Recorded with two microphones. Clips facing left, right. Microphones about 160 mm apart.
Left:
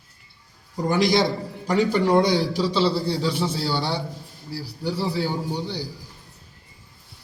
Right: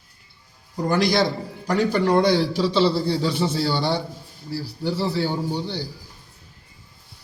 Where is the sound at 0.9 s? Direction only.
15° left (ahead or behind).